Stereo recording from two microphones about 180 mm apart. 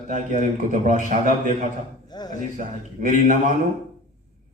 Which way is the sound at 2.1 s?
20° left (ahead or behind).